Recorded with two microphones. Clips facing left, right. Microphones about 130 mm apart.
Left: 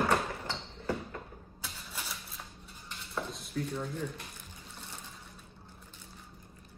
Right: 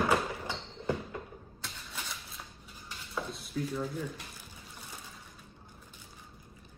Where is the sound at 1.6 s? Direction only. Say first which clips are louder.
Even; 5° left (ahead or behind).